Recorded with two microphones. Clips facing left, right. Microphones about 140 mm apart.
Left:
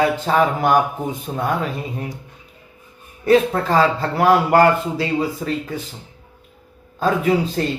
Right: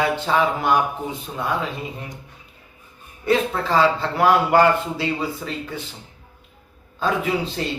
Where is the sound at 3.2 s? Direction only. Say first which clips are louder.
Left 5 dB; 45° left (ahead or behind).